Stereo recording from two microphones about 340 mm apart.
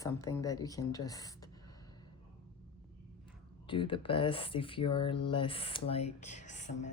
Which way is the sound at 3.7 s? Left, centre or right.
Centre.